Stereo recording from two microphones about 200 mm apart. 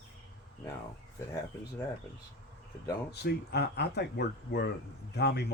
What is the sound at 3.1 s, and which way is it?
Speech, 55° left (ahead or behind).